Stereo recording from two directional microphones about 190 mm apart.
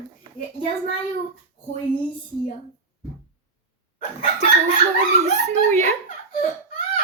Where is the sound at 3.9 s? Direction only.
40° left (ahead or behind).